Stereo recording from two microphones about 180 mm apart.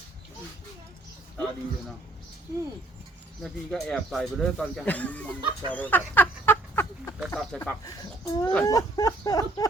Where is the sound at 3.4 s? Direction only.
Centre (ahead or behind).